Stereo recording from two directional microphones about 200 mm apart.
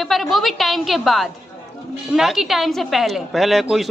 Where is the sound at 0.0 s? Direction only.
Centre (ahead or behind).